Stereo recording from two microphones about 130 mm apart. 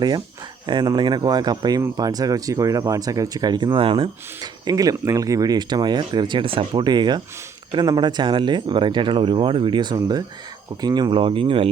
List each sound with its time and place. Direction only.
0.7 s speech: 35° right (ahead or behind)
4.6 s speech: 30° right (ahead or behind); by 11.7 s 45° right (ahead or behind)